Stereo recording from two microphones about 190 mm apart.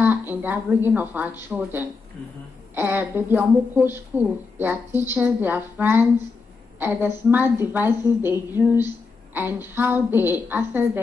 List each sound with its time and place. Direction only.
0.0 s a woman's voice: 10° right (ahead or behind)
7.2 s a woman's voice: 10° right (ahead or behind)